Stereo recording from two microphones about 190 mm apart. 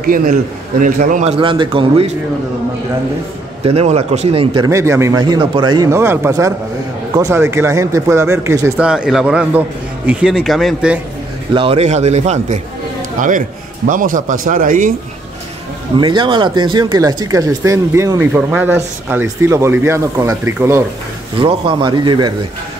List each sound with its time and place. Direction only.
0.0 s a man's voice: 45° right (ahead or behind)
1.4 s speech: 25° right (ahead or behind)
3.6 s speech: 35° right (ahead or behind)
4.6 s speech: 15° right (ahead or behind)
11.5 s a man's voice: 30° right (ahead or behind); by 14.9 s 45° right (ahead or behind)
16.0 s speech: 25° right (ahead or behind)
21.4 s speech: 25° right (ahead or behind)